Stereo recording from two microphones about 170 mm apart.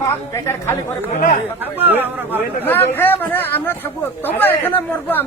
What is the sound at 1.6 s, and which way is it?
Speech, 10° right (ahead or behind).